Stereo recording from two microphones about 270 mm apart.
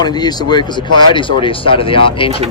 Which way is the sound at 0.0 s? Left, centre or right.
Centre.